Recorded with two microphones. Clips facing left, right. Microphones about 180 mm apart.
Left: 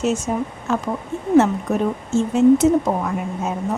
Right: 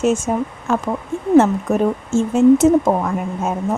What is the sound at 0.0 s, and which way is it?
A woman's voice, 50° right (ahead or behind).